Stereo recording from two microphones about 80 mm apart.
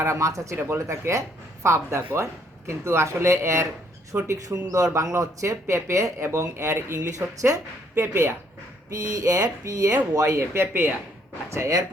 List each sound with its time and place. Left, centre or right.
0.0 s speech: right
0.5 s speech: right
7.2 s speech: right
8.9 s speech: right
11.5 s speech: right